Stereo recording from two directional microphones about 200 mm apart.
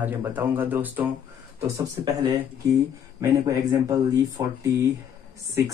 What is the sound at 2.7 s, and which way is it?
Speech, 15° right (ahead or behind).